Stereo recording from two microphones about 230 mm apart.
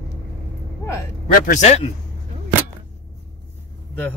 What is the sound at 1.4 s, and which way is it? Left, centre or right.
Speech, left.